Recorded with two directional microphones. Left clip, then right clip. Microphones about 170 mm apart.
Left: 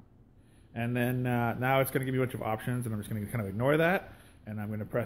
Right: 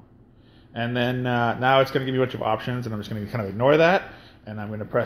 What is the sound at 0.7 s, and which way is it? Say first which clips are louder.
Speech: right 7 dB; 25° left (ahead or behind).